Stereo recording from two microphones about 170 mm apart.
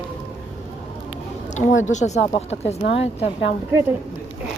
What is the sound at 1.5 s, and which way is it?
Speech, 45° left (ahead or behind).